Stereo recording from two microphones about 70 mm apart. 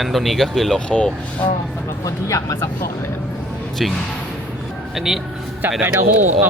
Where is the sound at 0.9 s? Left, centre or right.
Centre.